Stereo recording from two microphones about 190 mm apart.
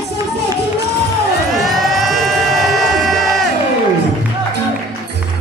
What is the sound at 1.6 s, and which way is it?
Music, centre (ahead or behind).